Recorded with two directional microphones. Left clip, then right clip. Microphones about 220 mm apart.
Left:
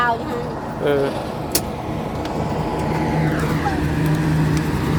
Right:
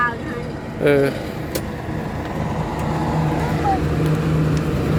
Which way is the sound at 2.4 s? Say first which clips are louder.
Left 2 dB; 50° right (ahead or behind).